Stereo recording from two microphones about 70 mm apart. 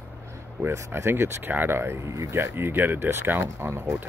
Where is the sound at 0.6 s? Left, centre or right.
Right.